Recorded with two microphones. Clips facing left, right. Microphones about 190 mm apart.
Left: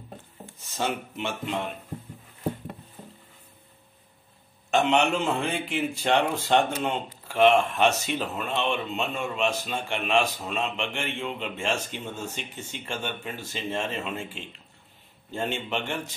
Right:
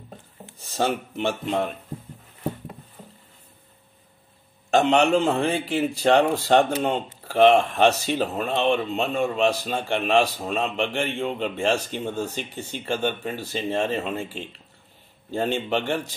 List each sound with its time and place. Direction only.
0.7 s speech: 35° right (ahead or behind)
4.6 s speech: 35° right (ahead or behind)